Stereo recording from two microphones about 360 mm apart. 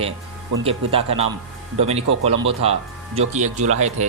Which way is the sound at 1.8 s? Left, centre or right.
Centre.